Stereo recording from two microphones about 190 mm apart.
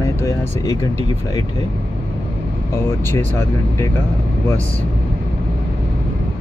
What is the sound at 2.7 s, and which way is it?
Speech, 10° left (ahead or behind).